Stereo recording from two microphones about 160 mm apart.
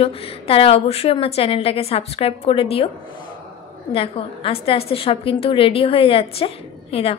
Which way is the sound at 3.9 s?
35° left (ahead or behind).